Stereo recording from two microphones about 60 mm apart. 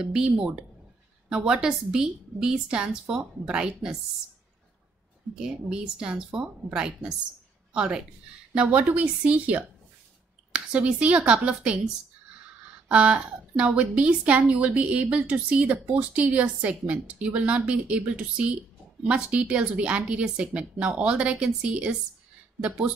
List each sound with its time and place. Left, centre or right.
0.0 s a woman's voice: centre
5.3 s a woman's voice: centre